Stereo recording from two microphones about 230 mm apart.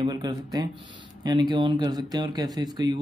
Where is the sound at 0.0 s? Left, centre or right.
Centre.